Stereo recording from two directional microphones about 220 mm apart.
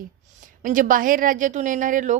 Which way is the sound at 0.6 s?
35° right (ahead or behind).